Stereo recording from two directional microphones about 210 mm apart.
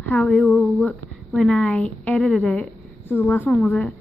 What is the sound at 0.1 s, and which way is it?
A woman's voice, 5° left (ahead or behind).